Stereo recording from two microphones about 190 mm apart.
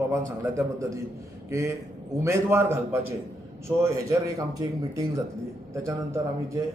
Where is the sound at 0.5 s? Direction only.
15° right (ahead or behind).